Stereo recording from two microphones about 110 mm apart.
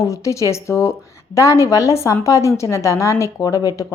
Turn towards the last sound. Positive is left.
turn(degrees=30)  # may be behind; listen again after turning